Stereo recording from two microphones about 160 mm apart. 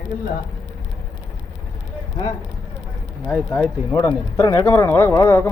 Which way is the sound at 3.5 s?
25° left (ahead or behind).